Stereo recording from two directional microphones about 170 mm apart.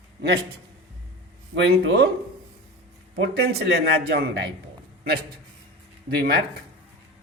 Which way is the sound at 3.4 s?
70° right (ahead or behind).